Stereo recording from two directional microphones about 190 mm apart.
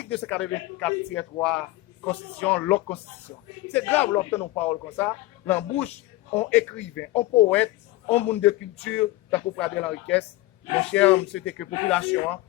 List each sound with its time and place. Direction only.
0.1 s a man's voice: 5° left (ahead or behind)